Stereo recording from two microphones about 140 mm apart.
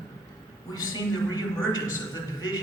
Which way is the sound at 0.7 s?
25° left (ahead or behind).